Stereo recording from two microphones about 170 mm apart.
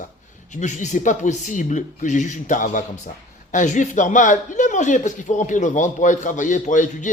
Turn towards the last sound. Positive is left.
turn(degrees=45)  # may be behind; listen again after turning